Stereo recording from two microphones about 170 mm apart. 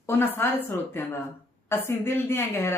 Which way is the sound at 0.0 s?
15° left (ahead or behind).